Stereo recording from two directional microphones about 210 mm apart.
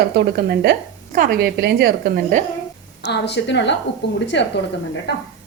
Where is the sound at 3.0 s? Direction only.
55° left (ahead or behind).